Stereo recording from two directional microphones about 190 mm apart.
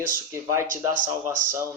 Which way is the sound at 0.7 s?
45° right (ahead or behind).